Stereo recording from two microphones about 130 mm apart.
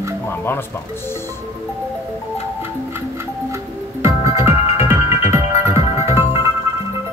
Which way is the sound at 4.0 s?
20° right (ahead or behind).